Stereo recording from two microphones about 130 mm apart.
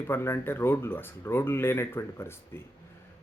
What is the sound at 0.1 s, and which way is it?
Speech, 20° left (ahead or behind).